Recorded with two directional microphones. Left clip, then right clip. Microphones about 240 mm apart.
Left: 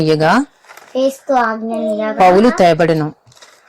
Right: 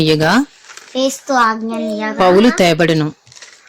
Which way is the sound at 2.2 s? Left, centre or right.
Centre.